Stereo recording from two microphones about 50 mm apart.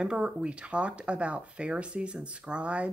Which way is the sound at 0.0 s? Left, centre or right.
Centre.